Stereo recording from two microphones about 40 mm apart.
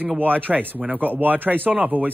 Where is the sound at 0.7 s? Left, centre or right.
Centre.